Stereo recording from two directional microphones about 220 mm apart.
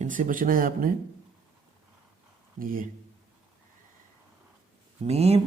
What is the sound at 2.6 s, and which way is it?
Speech, 40° right (ahead or behind).